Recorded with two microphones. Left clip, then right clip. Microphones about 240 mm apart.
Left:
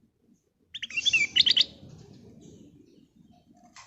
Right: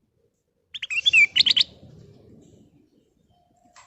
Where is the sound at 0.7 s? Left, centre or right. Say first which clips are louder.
Right 6 dB; right.